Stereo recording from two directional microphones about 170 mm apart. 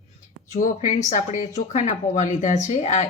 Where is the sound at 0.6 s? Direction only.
45° left (ahead or behind).